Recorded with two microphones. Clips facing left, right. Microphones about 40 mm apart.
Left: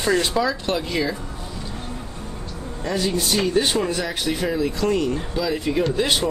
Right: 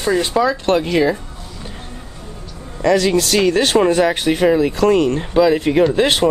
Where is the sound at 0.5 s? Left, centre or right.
Right.